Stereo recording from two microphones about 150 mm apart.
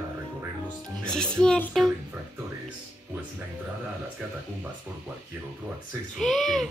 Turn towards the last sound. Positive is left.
turn(degrees=0)  # may be behind; listen again after turning